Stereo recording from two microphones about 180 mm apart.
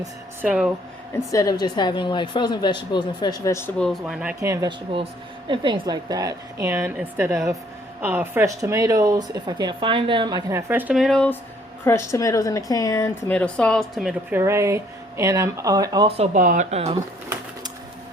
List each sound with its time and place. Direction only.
0.4 s speech: 5° right (ahead or behind)
1.1 s a woman's voice: 20° left (ahead or behind)
3.8 s speech: centre (ahead or behind)
4.4 s a woman's voice: 15° right (ahead or behind)
5.5 s a woman's voice: 25° right (ahead or behind)
10.7 s speech: 10° right (ahead or behind)
11.9 s a woman's voice: 15° left (ahead or behind); by 16.0 s 20° right (ahead or behind)
16.0 s speech: 35° right (ahead or behind)